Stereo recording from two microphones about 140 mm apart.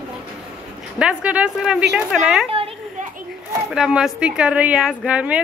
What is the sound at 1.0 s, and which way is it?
A woman's voice, 10° right (ahead or behind).